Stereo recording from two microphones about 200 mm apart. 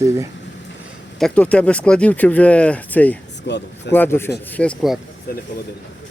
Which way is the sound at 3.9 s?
10° left (ahead or behind).